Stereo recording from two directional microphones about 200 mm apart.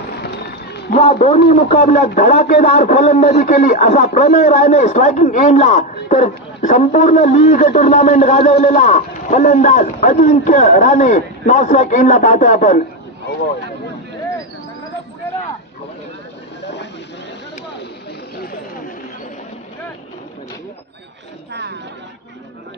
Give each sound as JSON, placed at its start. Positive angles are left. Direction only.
{"t": 0.2, "sound": "run", "side_deg": 55}
{"t": 1.2, "sound": "a man's voice", "side_deg": 35}
{"t": 2.9, "sound": "a man's voice", "side_deg": 35}